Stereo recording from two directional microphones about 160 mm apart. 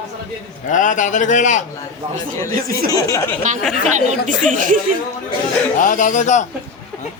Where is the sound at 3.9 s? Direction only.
50° right (ahead or behind).